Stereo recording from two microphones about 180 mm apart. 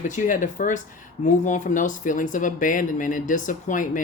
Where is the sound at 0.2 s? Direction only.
45° left (ahead or behind).